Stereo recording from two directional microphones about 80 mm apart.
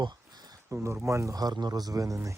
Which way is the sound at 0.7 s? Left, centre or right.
Right.